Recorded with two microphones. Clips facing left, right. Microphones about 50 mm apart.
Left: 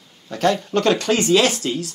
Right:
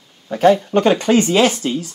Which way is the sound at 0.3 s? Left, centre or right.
Centre.